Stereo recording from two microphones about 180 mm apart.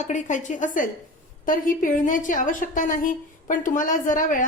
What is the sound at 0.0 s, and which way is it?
A woman's voice, 40° left (ahead or behind).